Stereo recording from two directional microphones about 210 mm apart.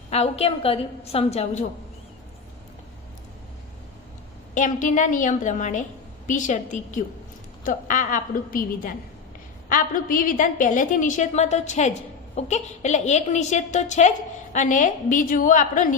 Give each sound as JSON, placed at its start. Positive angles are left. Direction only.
{"t": 0.1, "sound": "a woman's voice", "side_deg": 30}
{"t": 4.5, "sound": "a woman's voice", "side_deg": 35}